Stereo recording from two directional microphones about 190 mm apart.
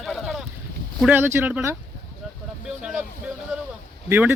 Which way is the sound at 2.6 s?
5° right (ahead or behind).